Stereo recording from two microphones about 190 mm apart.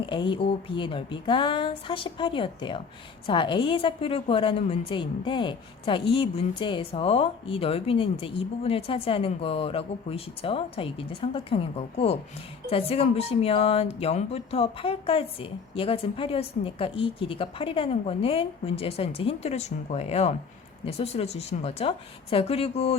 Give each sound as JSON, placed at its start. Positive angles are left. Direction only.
{"t": 0.0, "sound": "a woman's voice", "side_deg": 25}